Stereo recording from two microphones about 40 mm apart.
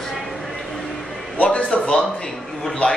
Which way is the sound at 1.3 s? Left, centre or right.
Left.